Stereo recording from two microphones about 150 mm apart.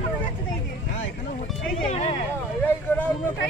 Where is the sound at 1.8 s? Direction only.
45° left (ahead or behind).